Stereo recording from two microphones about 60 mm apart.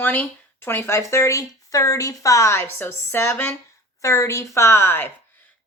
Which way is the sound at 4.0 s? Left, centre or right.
Left.